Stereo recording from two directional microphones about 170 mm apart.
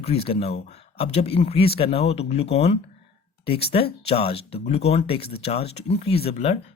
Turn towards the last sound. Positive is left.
turn(degrees=35)  # may be behind; listen again after turning